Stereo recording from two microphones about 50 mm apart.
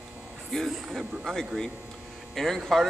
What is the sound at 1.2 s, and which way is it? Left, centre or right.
Speech, centre.